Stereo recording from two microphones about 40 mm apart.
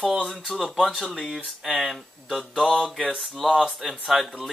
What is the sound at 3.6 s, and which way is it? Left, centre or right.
Speech, centre.